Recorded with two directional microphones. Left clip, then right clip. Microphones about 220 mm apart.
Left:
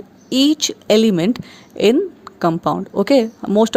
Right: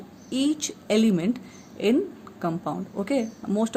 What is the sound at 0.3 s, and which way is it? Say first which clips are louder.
Speech: left 10 dB; 40° left (ahead or behind).